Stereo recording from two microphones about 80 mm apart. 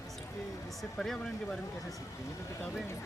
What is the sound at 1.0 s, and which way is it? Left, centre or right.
Speech, centre.